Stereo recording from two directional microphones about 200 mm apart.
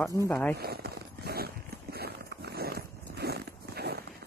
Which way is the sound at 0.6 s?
50° right (ahead or behind).